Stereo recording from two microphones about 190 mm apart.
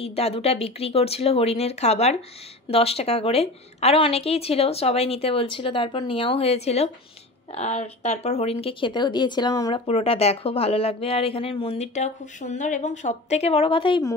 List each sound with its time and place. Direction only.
0.0 s speech: 30° left (ahead or behind)